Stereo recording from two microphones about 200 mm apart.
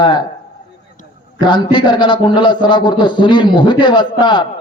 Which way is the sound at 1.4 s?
25° left (ahead or behind).